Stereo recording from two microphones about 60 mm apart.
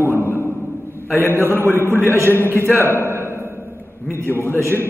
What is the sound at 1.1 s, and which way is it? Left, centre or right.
A man's voice, left.